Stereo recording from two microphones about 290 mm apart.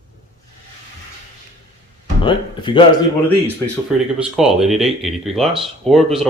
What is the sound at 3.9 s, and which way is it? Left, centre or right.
Speech, centre.